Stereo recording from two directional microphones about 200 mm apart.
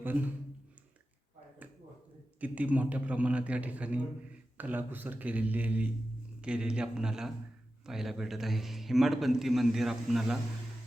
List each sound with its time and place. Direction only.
2.4 s a man's voice: 5° right (ahead or behind)